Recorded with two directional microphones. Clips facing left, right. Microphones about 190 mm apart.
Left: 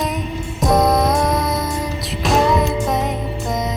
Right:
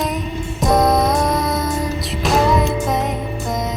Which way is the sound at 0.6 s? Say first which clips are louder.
Even; centre (ahead or behind).